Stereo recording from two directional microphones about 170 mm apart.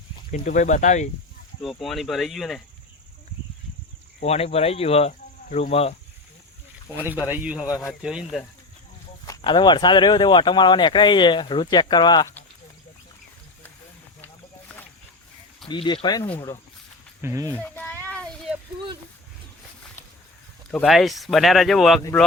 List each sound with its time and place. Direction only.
0.3 s speech: 50° left (ahead or behind)
1.6 s speech: centre (ahead or behind)
4.2 s speech: 40° left (ahead or behind)
6.8 s a man's voice: 10° right (ahead or behind)
9.2 s speech: 25° left (ahead or behind)
15.7 s speech: 30° left (ahead or behind)
17.2 s a man's voice: 15° right (ahead or behind)
17.5 s speech: 10° left (ahead or behind)
18.0 s a sound: 5° left (ahead or behind)
20.7 s speech: centre (ahead or behind)